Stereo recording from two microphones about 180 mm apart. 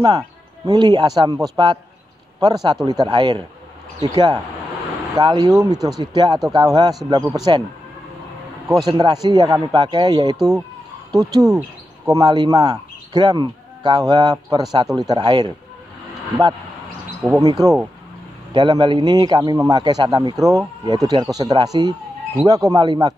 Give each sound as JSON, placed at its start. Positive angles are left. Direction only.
{"t": 0.7, "sound": "a man's voice", "side_deg": -25}
{"t": 8.6, "sound": "a man's voice", "side_deg": -20}
{"t": 17.3, "sound": "a man's voice", "side_deg": -20}